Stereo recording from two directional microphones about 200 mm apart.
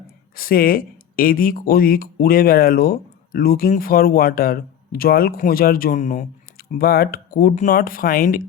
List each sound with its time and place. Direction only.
0.3 s speech: 45° left (ahead or behind)